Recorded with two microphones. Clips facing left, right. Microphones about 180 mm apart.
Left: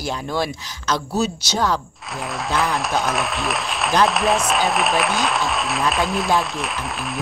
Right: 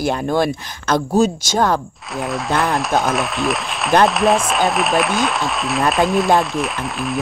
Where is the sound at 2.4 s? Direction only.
Centre (ahead or behind).